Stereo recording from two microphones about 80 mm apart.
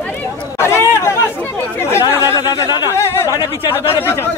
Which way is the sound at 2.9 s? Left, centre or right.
Left.